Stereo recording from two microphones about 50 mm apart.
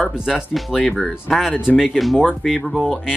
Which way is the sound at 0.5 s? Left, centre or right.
Centre.